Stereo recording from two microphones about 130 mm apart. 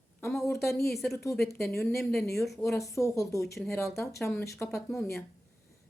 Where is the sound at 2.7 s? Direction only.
25° left (ahead or behind).